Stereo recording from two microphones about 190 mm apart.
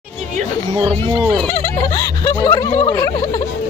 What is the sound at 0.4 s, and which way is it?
Speech, 30° right (ahead or behind).